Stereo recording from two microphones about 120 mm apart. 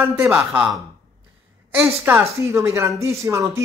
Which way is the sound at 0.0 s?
15° right (ahead or behind).